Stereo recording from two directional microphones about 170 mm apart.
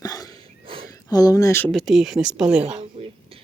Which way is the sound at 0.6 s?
30° right (ahead or behind).